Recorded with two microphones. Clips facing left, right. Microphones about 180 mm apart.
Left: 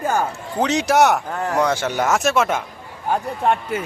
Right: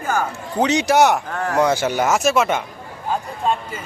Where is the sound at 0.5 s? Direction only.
Centre (ahead or behind).